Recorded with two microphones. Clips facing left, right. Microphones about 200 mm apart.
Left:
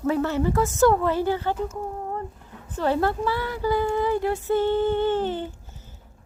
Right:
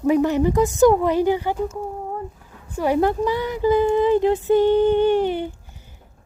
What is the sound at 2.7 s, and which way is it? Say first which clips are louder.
Speech: right 4 dB; 10° right (ahead or behind).